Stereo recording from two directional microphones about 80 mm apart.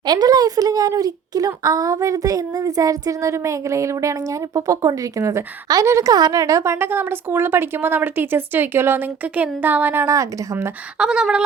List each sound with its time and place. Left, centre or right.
0.1 s a child's voice: right
11.0 s speech: centre